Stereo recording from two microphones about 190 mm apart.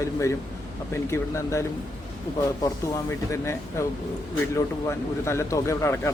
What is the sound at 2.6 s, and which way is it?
Speech, 15° left (ahead or behind).